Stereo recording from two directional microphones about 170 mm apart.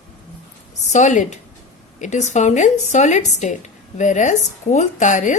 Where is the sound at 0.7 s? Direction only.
45° left (ahead or behind).